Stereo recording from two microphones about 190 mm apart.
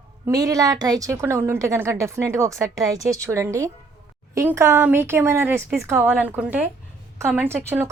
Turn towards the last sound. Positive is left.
turn(degrees=-10)  # may be behind; listen again after turning